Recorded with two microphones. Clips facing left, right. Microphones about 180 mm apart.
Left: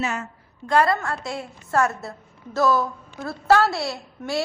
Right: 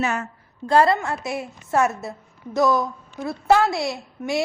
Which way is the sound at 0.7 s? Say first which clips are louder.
Right 2 dB; 30° right (ahead or behind).